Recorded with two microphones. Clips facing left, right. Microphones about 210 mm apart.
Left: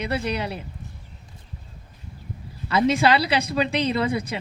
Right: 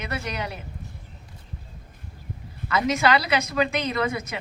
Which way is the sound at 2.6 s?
30° left (ahead or behind).